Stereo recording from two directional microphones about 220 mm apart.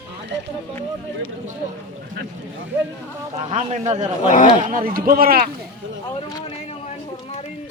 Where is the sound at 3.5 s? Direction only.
30° right (ahead or behind).